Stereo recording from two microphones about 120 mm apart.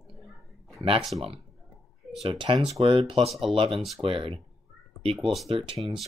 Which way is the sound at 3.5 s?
45° right (ahead or behind).